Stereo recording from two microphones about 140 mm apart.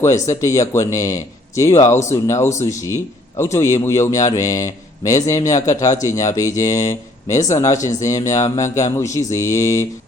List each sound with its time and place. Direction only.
0.0 s a man's voice: 20° left (ahead or behind)